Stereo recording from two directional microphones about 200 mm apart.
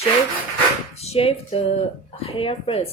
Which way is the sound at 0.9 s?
30° left (ahead or behind).